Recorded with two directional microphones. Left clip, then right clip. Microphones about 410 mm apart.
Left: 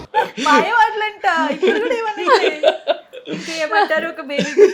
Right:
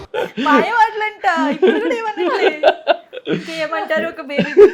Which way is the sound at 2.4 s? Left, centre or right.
Right.